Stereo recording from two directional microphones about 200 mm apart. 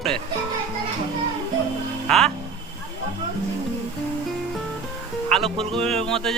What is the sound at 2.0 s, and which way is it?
Music, 5° left (ahead or behind).